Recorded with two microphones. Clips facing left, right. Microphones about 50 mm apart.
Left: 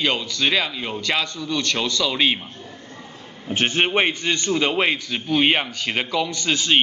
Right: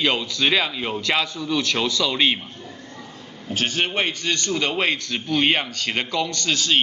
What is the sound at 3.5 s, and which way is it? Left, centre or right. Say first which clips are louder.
A man's voice: left 3 dB; left.